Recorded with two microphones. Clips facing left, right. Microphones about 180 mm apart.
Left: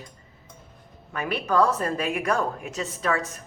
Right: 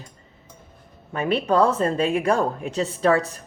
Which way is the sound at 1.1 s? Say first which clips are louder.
Right 4 dB; 25° right (ahead or behind).